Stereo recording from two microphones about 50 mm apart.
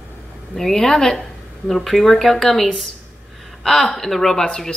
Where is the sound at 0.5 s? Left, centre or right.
Centre.